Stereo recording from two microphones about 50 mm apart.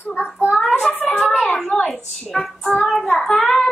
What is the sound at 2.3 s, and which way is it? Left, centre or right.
A child's voice, centre.